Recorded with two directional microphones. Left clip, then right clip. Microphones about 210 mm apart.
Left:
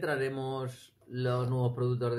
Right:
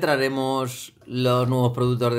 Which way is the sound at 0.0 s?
30° right (ahead or behind).